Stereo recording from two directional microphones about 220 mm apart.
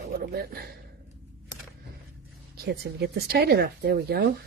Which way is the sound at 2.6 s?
45° right (ahead or behind).